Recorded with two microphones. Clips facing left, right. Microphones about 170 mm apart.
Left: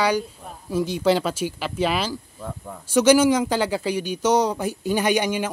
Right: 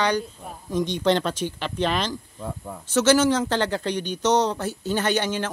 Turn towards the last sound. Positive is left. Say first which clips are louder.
# left 2 dB
turn(degrees=10)  # may be behind; listen again after turning